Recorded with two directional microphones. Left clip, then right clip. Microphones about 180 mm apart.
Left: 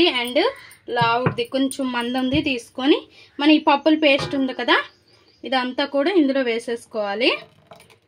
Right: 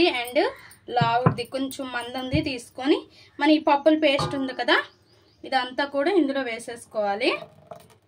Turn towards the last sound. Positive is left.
turn(degrees=45)  # may be behind; listen again after turning